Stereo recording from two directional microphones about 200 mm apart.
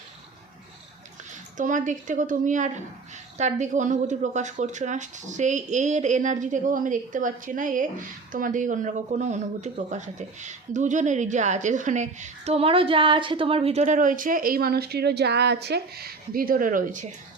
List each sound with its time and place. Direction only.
1.5 s speech: 40° right (ahead or behind)